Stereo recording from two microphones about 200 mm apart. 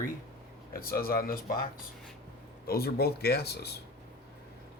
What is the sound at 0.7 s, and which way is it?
Speech, 50° left (ahead or behind).